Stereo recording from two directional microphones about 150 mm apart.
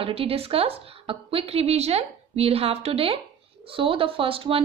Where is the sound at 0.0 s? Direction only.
40° right (ahead or behind).